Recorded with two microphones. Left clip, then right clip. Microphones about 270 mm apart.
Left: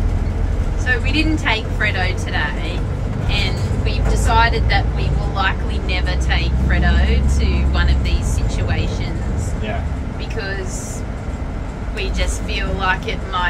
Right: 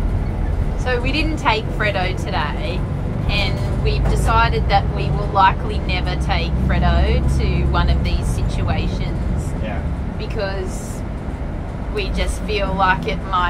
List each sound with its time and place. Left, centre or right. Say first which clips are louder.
0.8 s speech: left 2 dB; centre
12.0 s speech: even; centre